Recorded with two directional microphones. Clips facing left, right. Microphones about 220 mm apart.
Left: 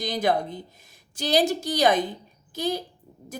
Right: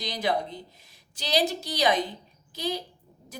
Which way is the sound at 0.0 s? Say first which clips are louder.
Left 4 dB; 50° left (ahead or behind).